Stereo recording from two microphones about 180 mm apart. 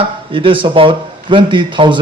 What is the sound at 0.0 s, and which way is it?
Speech, 30° right (ahead or behind).